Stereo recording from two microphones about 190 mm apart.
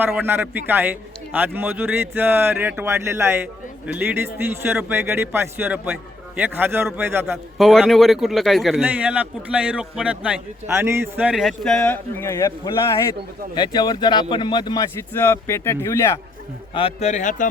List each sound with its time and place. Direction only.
0.0 s a man's voice: 10° right (ahead or behind)
7.6 s speech: centre (ahead or behind); by 14.8 s 20° left (ahead or behind)
15.1 s speech: 10° left (ahead or behind)
16.7 s speech: 30° left (ahead or behind)